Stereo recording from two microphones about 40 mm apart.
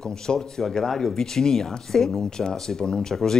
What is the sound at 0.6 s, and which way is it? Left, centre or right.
Speech, centre.